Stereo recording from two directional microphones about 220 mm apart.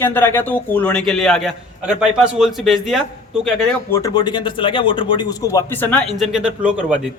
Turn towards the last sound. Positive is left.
turn(degrees=-5)  # may be behind; listen again after turning